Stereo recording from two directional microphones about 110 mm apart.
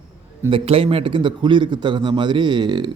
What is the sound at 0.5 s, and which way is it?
A man's voice, 60° right (ahead or behind).